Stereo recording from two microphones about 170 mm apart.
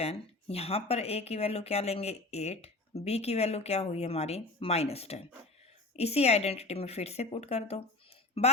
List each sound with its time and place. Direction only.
0.0 s speech: 35° left (ahead or behind)